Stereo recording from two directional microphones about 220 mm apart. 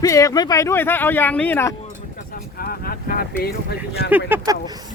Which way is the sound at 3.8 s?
10° right (ahead or behind).